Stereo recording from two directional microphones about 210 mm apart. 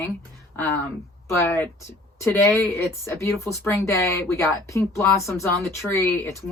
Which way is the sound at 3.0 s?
15° left (ahead or behind).